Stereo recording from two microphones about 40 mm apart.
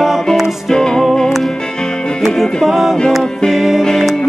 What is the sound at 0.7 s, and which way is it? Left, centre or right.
Music, centre.